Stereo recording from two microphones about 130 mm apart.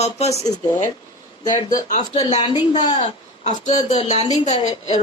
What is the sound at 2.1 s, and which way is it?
Speech, 50° left (ahead or behind).